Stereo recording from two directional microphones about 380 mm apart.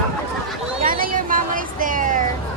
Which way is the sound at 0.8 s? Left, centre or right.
Right.